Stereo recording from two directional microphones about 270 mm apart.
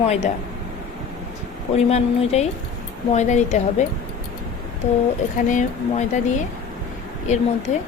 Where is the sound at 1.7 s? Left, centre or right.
Left.